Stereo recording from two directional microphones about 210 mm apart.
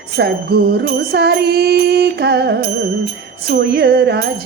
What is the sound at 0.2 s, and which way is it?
A woman's voice, 50° right (ahead or behind).